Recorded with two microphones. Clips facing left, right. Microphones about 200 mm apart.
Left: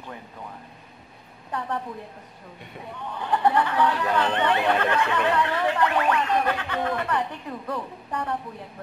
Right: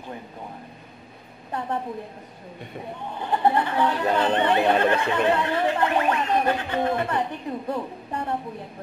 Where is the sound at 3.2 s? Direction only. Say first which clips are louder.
Even; 25° right (ahead or behind).